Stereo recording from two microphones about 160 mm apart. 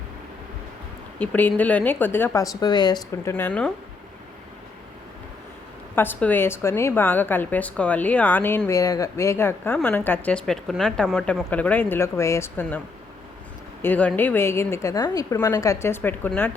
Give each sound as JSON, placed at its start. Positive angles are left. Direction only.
{"t": 1.2, "sound": "a woman's voice", "side_deg": 10}
{"t": 3.3, "sound": "a woman's voice", "side_deg": 10}
{"t": 6.0, "sound": "a woman's voice", "side_deg": 10}
{"t": 13.8, "sound": "a woman's voice", "side_deg": 10}